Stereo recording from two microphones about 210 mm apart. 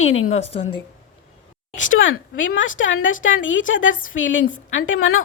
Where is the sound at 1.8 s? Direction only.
65° left (ahead or behind).